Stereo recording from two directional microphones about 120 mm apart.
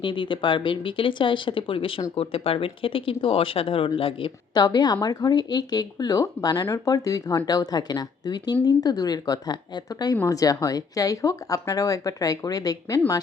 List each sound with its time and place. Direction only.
0.0 s speech: 45° left (ahead or behind)
4.5 s speech: 35° left (ahead or behind)